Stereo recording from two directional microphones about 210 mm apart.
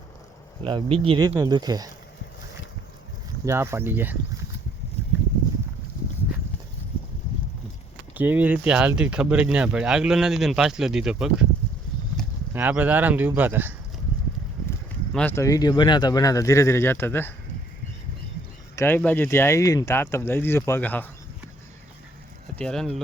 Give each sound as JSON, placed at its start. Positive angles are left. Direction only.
{"t": 0.6, "sound": "speech", "side_deg": -25}
{"t": 3.4, "sound": "speech", "side_deg": -10}
{"t": 8.1, "sound": "speech", "side_deg": -10}
{"t": 12.5, "sound": "speech", "side_deg": -10}
{"t": 14.7, "sound": "speech", "side_deg": 5}
{"t": 18.8, "sound": "speech", "side_deg": 10}
{"t": 22.5, "sound": "speech", "side_deg": 5}